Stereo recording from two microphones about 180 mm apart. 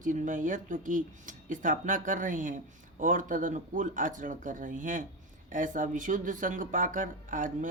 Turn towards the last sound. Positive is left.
turn(degrees=-45)  # may be behind; listen again after turning